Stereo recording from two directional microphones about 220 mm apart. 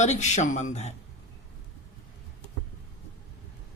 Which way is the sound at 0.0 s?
30° left (ahead or behind).